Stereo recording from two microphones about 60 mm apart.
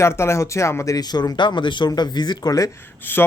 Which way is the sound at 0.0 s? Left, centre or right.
Left.